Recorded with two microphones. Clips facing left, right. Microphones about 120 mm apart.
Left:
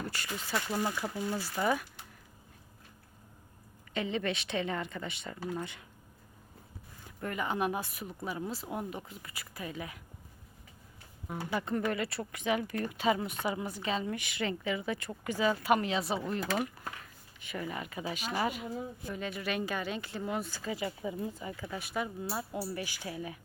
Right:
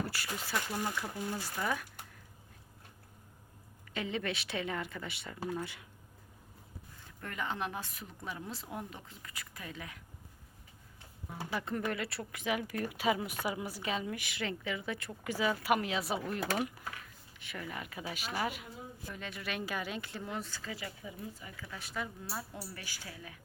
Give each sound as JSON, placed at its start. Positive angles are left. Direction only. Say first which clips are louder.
{"t": 0.0, "sound": "speech", "louder": "even", "side_deg": -5}
{"t": 0.5, "sound": "speech", "louder": "left 3 dB", "side_deg": 15}
{"t": 3.9, "sound": "speech", "louder": "left 3 dB", "side_deg": 0}
{"t": 7.2, "sound": "speech", "louder": "left 5 dB", "side_deg": 10}
{"t": 11.5, "sound": "speech", "louder": "left 3 dB", "side_deg": 0}
{"t": 17.4, "sound": "speech", "louder": "left 4 dB", "side_deg": 0}
{"t": 21.8, "sound": "speech", "louder": "left 4 dB", "side_deg": 10}